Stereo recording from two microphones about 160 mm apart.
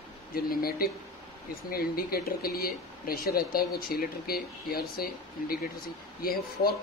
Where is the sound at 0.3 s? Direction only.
65° left (ahead or behind).